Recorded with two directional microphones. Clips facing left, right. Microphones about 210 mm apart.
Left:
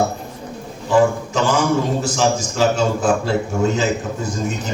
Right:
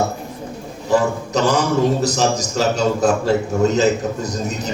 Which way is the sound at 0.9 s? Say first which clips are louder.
Left 2 dB; 40° right (ahead or behind).